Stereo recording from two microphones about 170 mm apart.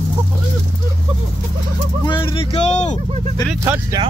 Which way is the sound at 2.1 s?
30° left (ahead or behind).